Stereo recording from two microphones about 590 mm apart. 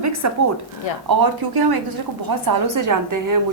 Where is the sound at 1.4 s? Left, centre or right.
Right.